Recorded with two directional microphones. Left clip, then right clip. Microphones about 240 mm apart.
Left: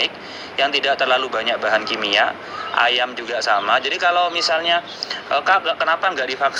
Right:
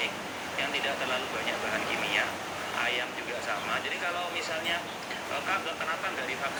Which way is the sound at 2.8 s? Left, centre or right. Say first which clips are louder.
Left 14 dB; left.